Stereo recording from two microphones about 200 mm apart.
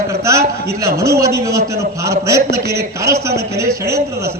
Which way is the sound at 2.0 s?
15° right (ahead or behind).